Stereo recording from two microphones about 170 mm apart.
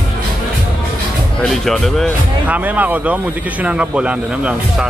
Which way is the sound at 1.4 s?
Centre (ahead or behind).